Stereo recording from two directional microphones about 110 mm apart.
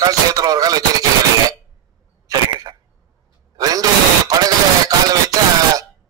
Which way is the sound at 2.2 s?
35° right (ahead or behind).